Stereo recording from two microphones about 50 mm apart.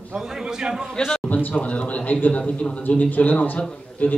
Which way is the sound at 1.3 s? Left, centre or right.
Left.